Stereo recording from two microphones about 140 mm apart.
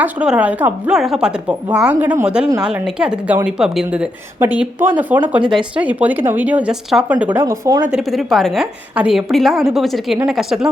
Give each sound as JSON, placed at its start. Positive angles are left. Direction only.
{"t": 0.0, "sound": "a woman's voice", "side_deg": -10}
{"t": 7.6, "sound": "speech", "side_deg": -30}
{"t": 7.9, "sound": "a woman's voice", "side_deg": 0}